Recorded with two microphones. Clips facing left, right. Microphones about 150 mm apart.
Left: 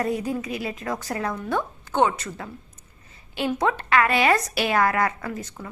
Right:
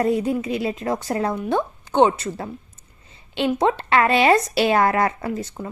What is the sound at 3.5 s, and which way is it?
A woman's voice, 25° right (ahead or behind).